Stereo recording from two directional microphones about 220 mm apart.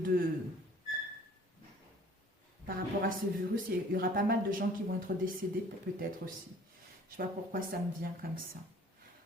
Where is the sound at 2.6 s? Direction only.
40° right (ahead or behind).